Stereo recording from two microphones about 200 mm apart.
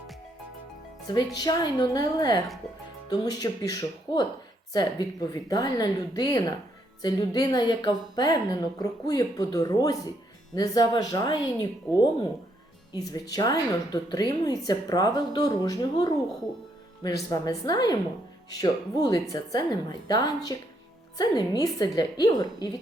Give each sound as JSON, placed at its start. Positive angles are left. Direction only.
{"t": 1.0, "sound": "a woman's voice", "side_deg": 20}
{"t": 17.3, "sound": "a woman's voice", "side_deg": 20}